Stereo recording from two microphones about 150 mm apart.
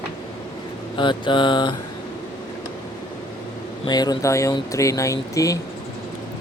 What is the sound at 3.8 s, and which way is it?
Speech, 25° left (ahead or behind).